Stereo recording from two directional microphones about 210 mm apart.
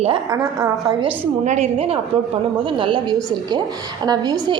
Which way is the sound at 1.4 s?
30° right (ahead or behind).